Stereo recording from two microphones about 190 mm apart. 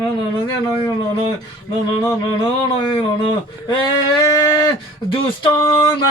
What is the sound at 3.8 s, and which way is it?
Speech, 20° left (ahead or behind).